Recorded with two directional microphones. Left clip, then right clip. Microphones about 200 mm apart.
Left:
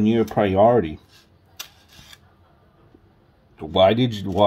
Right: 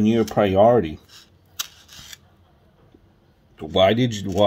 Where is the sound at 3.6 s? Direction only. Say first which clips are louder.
Left 1 dB; 5° right (ahead or behind).